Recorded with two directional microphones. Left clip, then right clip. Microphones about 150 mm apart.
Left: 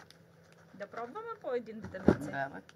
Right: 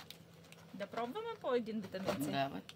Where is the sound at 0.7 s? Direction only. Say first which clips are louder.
Even; 45° right (ahead or behind).